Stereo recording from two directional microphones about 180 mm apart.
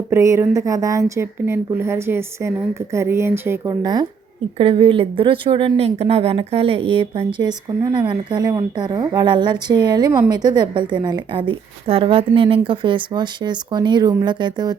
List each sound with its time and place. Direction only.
0.1 s a woman's voice: 15° right (ahead or behind)
4.5 s speech: 30° right (ahead or behind)